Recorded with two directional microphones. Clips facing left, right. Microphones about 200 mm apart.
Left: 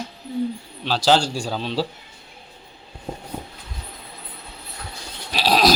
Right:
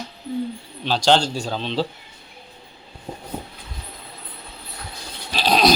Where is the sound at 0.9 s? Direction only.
5° left (ahead or behind).